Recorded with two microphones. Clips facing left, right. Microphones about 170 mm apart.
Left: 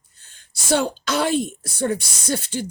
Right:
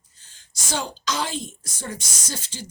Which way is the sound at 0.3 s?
55° left (ahead or behind).